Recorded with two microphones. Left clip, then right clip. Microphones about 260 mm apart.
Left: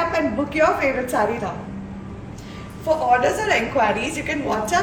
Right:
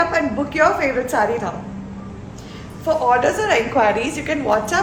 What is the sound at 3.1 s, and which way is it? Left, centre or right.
A woman's voice, centre.